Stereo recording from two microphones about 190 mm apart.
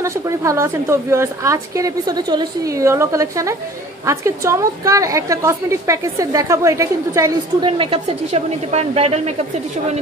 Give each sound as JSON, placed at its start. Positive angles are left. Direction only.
{"t": 0.0, "sound": "a woman's voice", "side_deg": -15}
{"t": 7.7, "sound": "a woman's voice", "side_deg": -30}